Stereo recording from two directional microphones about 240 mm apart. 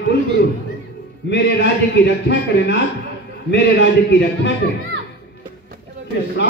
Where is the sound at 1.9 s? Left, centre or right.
Left.